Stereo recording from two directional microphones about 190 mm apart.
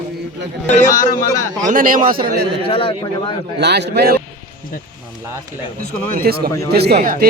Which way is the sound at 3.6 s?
60° right (ahead or behind).